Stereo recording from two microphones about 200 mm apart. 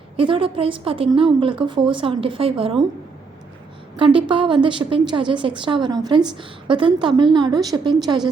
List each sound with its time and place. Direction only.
0.2 s a woman's voice: 25° right (ahead or behind)
3.9 s a woman's voice: 25° right (ahead or behind)